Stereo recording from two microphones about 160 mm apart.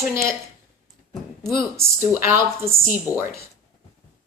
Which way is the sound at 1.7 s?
15° right (ahead or behind).